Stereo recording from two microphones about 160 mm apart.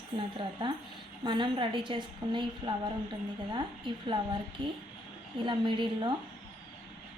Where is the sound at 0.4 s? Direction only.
30° right (ahead or behind).